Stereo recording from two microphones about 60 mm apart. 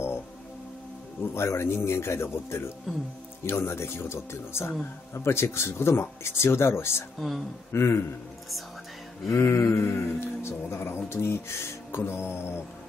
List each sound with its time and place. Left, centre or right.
1.2 s speech: left
7.2 s speech: centre
7.7 s speech: left
9.3 s speech: left